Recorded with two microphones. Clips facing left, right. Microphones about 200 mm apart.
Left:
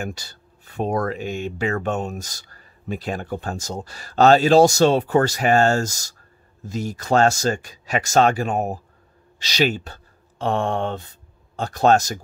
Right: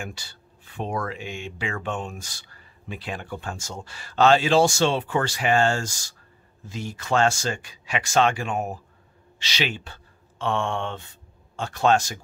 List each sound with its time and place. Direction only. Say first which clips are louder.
0.0 s speech: left 6 dB; 40° left (ahead or behind)